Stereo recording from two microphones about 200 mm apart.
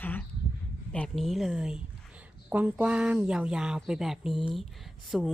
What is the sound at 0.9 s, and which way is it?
A woman's voice, centre (ahead or behind).